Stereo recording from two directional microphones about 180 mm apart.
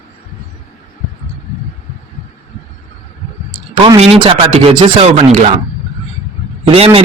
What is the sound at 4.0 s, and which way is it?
Speech, 30° right (ahead or behind).